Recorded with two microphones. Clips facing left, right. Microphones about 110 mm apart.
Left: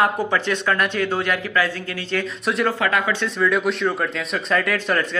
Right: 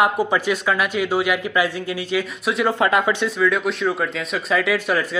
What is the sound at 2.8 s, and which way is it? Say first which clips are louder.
Speech: right 3 dB; 20° right (ahead or behind).